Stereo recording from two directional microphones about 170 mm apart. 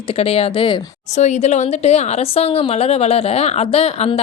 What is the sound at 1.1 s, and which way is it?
Speech, 40° left (ahead or behind).